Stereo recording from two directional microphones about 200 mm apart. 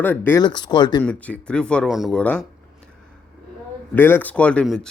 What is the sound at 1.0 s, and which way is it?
Speech, 5° left (ahead or behind).